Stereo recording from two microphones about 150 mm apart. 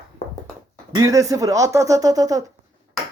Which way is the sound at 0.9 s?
20° right (ahead or behind).